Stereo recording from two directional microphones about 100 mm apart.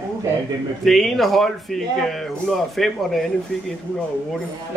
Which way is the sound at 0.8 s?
Centre (ahead or behind).